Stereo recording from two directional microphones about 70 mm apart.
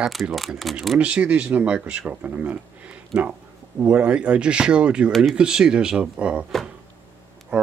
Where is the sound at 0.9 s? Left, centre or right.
Centre.